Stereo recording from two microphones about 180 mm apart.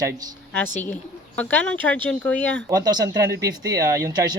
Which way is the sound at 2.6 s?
20° right (ahead or behind).